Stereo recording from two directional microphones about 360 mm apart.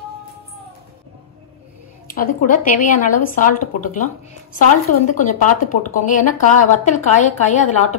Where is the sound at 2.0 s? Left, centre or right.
Left.